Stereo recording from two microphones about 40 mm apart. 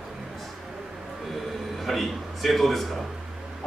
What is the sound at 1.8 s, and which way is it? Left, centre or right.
A man's voice, centre.